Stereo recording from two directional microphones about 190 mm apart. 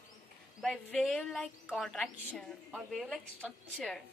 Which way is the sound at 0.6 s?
Centre (ahead or behind).